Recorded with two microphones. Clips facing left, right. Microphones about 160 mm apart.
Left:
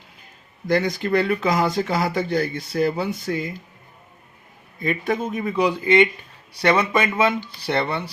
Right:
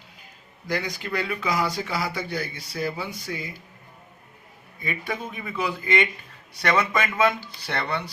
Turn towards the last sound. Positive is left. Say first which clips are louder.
# left 6 dB
turn(degrees=25)  # may be behind; listen again after turning